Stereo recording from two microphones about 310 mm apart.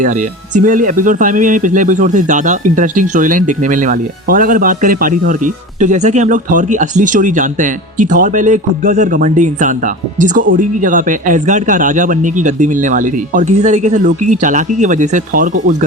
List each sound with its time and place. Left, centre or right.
0.5 s speech: right